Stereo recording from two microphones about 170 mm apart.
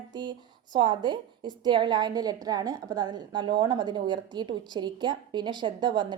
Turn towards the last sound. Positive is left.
turn(degrees=-25)  # may be behind; listen again after turning